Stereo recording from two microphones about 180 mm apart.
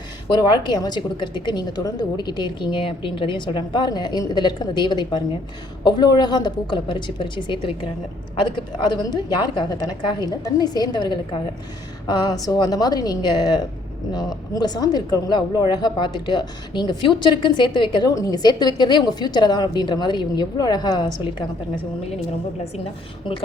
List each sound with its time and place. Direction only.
0.3 s speech: 25° left (ahead or behind)